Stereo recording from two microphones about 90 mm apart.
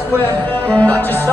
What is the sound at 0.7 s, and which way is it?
Music, 15° left (ahead or behind).